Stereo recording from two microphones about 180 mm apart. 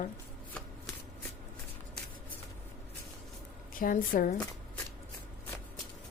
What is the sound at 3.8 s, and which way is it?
Speech, 50° left (ahead or behind).